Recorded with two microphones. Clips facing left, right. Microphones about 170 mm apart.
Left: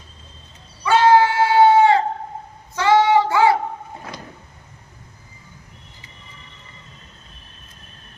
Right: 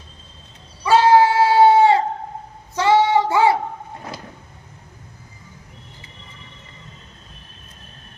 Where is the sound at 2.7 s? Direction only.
25° right (ahead or behind).